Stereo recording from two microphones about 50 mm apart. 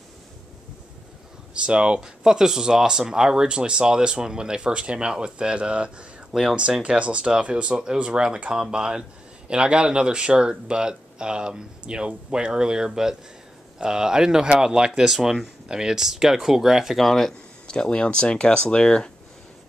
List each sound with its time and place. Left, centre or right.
1.5 s speech: right
2.2 s speech: centre
17.6 s speech: centre